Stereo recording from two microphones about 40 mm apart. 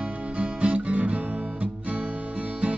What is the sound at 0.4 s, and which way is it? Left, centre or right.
Guitar, right.